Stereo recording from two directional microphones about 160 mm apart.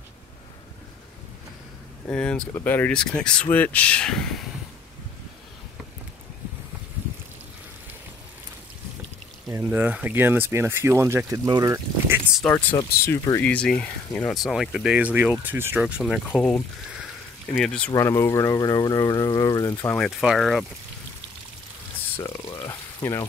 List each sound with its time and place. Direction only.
2.0 s speech: 5° left (ahead or behind)
9.5 s speech: 10° right (ahead or behind)
12.4 s speech: 5° left (ahead or behind)
13.0 s speech: 20° left (ahead or behind)
17.9 s speech: 20° left (ahead or behind)
20.0 s speech: centre (ahead or behind)
22.4 s frying: 30° left (ahead or behind)